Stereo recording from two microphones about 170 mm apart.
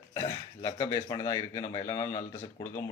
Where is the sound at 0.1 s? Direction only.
20° left (ahead or behind).